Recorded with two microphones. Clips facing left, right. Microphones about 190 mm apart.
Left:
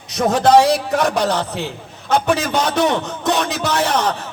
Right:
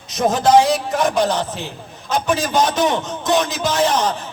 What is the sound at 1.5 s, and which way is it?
A man's voice, 60° left (ahead or behind).